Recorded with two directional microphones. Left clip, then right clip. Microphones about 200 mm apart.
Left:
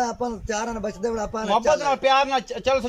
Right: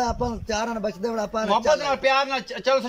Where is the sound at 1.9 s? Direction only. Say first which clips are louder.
Left 2 dB; 15° left (ahead or behind).